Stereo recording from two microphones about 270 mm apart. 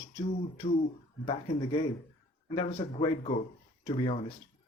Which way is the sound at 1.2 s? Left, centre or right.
Centre.